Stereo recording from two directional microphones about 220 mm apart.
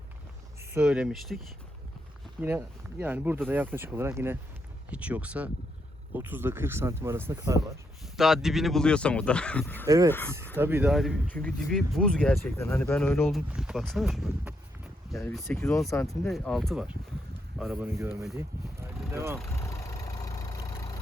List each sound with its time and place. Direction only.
0.7 s speech: 5° right (ahead or behind)
2.4 s speech: 10° right (ahead or behind)
8.1 s speech: centre (ahead or behind)
9.8 s speech: 15° right (ahead or behind)
10.1 s speech: 10° left (ahead or behind)
10.6 s speech: 10° right (ahead or behind)
15.2 s speech: 10° left (ahead or behind)
16.0 s speech: centre (ahead or behind)
19.1 s speech: 10° right (ahead or behind)
19.5 s vehicle: 15° left (ahead or behind)